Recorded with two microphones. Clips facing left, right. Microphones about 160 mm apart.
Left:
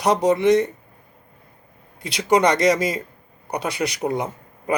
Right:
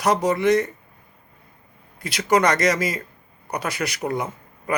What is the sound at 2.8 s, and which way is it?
A man's voice, 30° left (ahead or behind).